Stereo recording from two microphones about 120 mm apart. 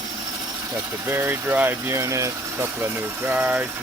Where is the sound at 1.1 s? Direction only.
20° right (ahead or behind).